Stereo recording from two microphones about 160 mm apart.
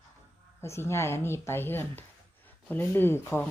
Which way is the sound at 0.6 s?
15° left (ahead or behind).